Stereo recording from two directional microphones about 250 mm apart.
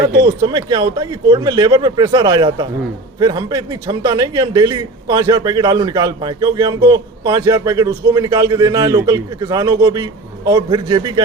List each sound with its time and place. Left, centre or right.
0.2 s speech: centre